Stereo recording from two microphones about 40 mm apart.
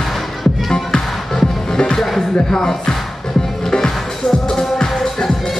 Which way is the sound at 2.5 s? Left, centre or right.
Centre.